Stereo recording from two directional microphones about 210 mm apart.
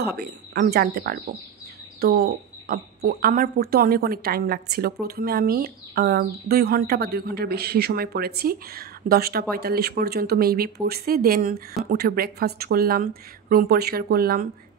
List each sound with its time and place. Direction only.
0.0 s speech: 50° right (ahead or behind)